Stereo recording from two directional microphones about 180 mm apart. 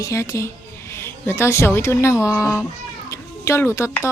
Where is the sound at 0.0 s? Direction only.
15° left (ahead or behind).